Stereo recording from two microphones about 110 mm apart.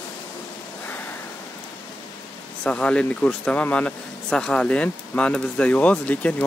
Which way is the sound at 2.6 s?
10° left (ahead or behind).